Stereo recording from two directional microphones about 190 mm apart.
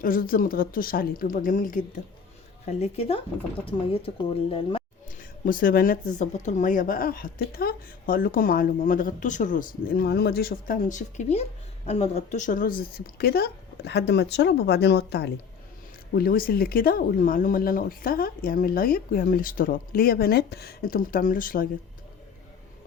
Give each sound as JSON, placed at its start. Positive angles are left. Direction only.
{"t": 0.0, "sound": "speech", "side_deg": 50}
{"t": 2.8, "sound": "speech", "side_deg": 30}
{"t": 5.5, "sound": "speech", "side_deg": 45}
{"t": 16.1, "sound": "speech", "side_deg": 50}